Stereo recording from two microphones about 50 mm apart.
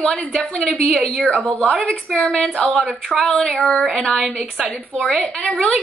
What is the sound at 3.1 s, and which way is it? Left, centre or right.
Speech, centre.